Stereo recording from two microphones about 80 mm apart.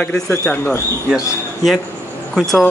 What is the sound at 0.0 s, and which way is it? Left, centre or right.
Speech, centre.